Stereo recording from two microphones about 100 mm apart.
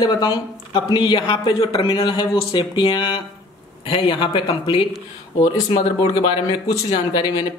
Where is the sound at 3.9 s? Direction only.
65° left (ahead or behind).